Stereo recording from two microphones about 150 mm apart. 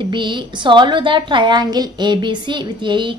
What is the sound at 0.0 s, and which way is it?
A woman's voice, 30° right (ahead or behind).